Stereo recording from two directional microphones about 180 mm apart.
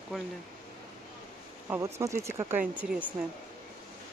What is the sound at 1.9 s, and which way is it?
Speech, 15° right (ahead or behind).